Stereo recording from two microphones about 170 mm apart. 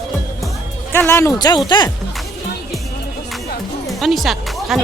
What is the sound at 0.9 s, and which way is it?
Speech, 15° left (ahead or behind).